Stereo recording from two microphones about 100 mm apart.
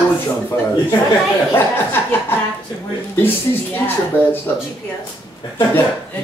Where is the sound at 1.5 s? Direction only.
20° left (ahead or behind).